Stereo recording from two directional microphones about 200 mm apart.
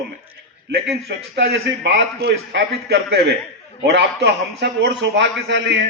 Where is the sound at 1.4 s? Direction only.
55° right (ahead or behind).